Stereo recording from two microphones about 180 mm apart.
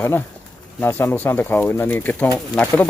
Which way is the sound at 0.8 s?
10° left (ahead or behind).